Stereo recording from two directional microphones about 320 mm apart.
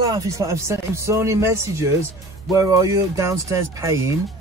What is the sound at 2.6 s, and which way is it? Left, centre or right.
Speech, centre.